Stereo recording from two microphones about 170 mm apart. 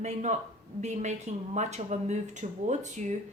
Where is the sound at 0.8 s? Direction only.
45° right (ahead or behind).